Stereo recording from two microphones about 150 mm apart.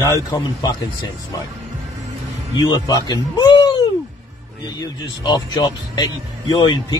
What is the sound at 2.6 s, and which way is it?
Speech, 25° left (ahead or behind).